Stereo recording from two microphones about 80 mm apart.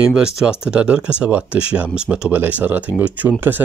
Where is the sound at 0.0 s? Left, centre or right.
Centre.